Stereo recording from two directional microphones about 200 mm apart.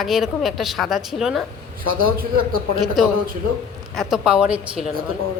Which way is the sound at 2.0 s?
45° right (ahead or behind).